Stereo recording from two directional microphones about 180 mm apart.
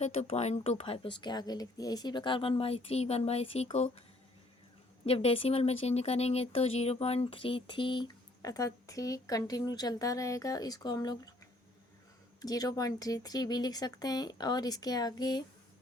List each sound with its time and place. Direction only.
0.0 s a woman's voice: 35° left (ahead or behind)
5.0 s a woman's voice: 35° left (ahead or behind)
12.4 s speech: 20° left (ahead or behind)